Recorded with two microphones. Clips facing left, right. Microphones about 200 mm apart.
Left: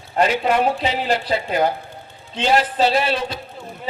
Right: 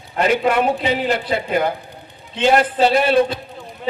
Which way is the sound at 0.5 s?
55° right (ahead or behind).